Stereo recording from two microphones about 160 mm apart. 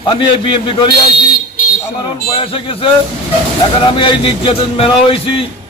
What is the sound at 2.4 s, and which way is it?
Speech, 35° left (ahead or behind).